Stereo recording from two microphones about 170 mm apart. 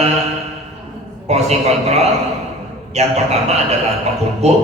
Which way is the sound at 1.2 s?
40° right (ahead or behind).